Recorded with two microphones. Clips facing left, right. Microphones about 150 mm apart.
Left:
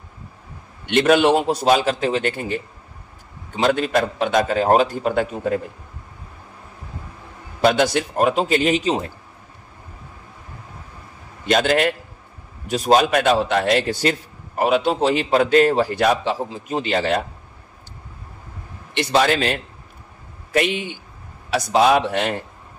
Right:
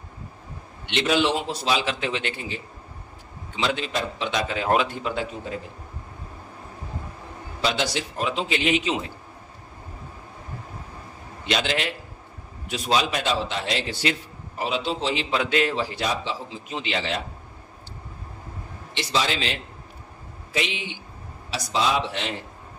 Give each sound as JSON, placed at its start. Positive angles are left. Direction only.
{"t": 0.8, "sound": "a man's voice", "side_deg": 50}
{"t": 7.6, "sound": "a man's voice", "side_deg": 50}
{"t": 11.4, "sound": "a man's voice", "side_deg": 50}
{"t": 18.9, "sound": "a man's voice", "side_deg": 55}